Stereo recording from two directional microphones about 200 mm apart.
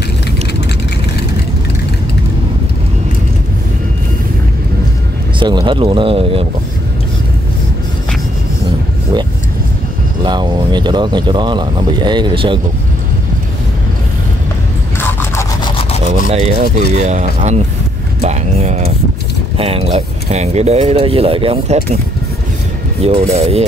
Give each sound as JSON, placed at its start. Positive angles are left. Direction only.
{"t": 5.4, "sound": "speech", "side_deg": -25}
{"t": 10.2, "sound": "speech", "side_deg": -20}
{"t": 15.0, "sound": "a sound", "side_deg": 10}
{"t": 15.6, "sound": "a sound", "side_deg": 30}
{"t": 16.3, "sound": "speech", "side_deg": -30}
{"t": 23.0, "sound": "speech", "side_deg": -30}